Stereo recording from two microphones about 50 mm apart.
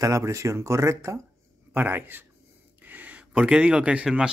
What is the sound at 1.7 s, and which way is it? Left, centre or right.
Speech, right.